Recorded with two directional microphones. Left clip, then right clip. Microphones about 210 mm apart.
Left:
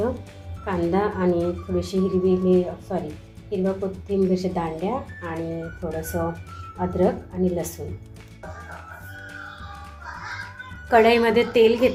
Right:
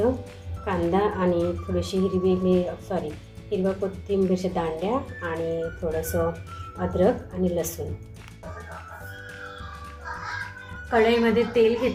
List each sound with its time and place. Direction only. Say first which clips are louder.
0.6 s speech: even; centre (ahead or behind)
10.8 s a woman's voice: left 4 dB; 45° left (ahead or behind)